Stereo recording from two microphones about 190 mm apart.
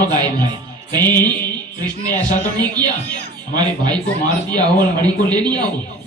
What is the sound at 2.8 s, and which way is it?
Speech, 20° right (ahead or behind).